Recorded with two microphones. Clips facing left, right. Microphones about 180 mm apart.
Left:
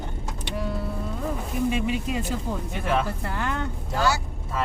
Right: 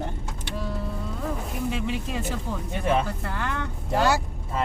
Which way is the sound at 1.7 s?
15° left (ahead or behind).